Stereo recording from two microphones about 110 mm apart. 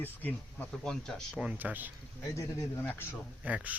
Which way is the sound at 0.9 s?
5° left (ahead or behind).